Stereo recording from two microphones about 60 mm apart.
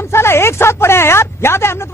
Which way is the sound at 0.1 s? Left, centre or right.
Left.